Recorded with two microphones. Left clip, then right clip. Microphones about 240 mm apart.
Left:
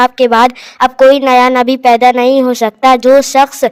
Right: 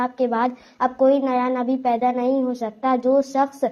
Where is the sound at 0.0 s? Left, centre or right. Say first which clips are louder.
Left 14 dB; left.